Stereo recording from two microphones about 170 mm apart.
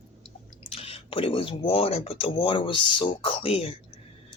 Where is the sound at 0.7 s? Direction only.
35° left (ahead or behind).